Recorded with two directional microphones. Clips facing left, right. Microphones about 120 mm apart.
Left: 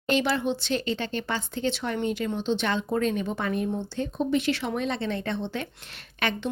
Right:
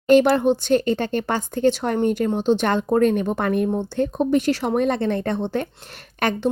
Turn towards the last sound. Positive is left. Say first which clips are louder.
# right 7 dB
turn(degrees=-40)  # may be behind; listen again after turning